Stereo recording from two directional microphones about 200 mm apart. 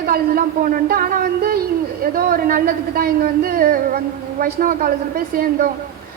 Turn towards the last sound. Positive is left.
turn(degrees=-45)  # may be behind; listen again after turning